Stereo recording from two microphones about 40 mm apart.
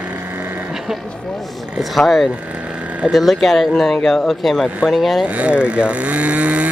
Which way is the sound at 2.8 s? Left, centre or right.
Right.